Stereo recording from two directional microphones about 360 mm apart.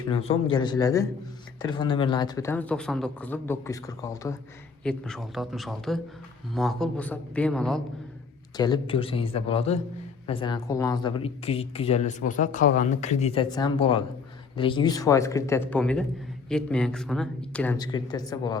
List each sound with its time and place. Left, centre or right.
0.1 s speech: centre